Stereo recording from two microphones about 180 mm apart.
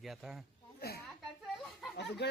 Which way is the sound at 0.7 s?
60° left (ahead or behind).